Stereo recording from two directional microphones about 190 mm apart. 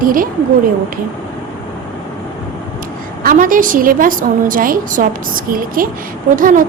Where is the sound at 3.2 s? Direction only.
45° right (ahead or behind).